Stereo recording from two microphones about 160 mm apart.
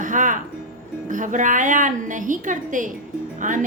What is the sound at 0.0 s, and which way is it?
Music, 55° right (ahead or behind).